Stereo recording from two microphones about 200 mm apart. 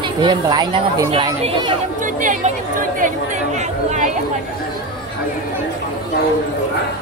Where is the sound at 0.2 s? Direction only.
20° right (ahead or behind).